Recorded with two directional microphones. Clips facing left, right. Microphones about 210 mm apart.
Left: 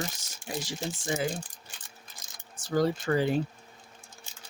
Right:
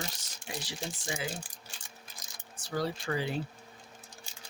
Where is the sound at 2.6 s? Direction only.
45° left (ahead or behind).